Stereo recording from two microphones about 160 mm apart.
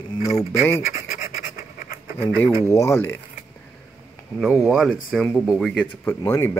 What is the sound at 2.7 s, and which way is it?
Speech, 15° left (ahead or behind).